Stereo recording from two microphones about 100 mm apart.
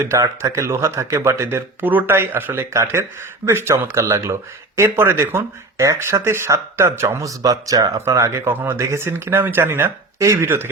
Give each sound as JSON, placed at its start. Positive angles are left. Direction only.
{"t": 0.0, "sound": "speech", "side_deg": -30}